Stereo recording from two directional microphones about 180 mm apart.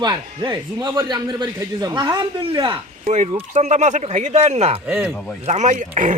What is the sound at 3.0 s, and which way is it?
Speech, 40° right (ahead or behind).